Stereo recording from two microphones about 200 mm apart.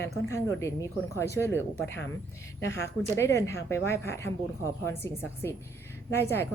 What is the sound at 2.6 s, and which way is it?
Speech, 60° left (ahead or behind).